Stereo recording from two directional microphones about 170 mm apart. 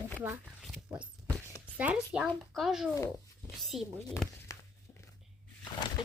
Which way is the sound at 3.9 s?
15° left (ahead or behind).